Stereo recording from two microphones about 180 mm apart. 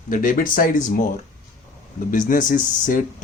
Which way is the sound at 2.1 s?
45° left (ahead or behind).